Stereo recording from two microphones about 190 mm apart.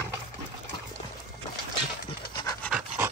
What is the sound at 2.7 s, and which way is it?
Pant, 5° right (ahead or behind).